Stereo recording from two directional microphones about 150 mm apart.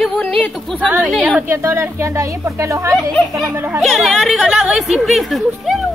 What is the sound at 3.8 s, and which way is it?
Speech, centre (ahead or behind).